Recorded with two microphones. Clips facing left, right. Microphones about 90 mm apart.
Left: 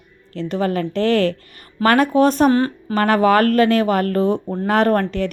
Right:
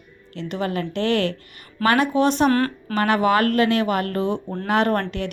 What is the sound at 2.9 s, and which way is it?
Speech, 40° left (ahead or behind).